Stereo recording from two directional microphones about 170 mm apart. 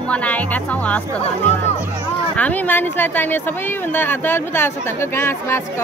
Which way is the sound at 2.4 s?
10° left (ahead or behind).